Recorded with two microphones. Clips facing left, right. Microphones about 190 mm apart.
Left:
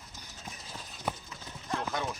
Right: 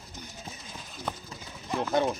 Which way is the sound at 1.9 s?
25° right (ahead or behind).